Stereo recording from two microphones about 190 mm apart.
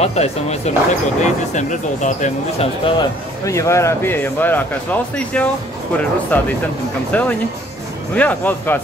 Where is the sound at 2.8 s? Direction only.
20° left (ahead or behind).